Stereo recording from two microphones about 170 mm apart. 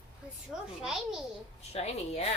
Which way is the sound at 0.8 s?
5° right (ahead or behind).